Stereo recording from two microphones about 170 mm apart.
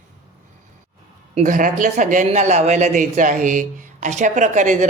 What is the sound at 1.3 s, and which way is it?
Speech, 50° right (ahead or behind).